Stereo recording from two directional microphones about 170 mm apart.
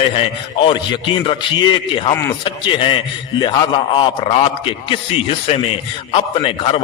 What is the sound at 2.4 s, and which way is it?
A man's voice, 30° left (ahead or behind).